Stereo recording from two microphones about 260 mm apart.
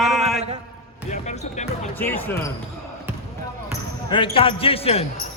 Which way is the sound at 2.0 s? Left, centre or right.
Centre.